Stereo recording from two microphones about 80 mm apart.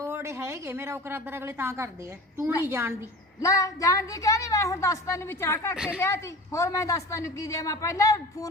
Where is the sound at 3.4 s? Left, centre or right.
Left.